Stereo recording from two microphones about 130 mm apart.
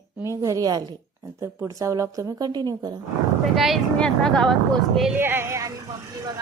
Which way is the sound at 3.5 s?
Centre (ahead or behind).